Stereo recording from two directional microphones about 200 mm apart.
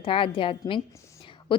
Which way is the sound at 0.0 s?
25° left (ahead or behind).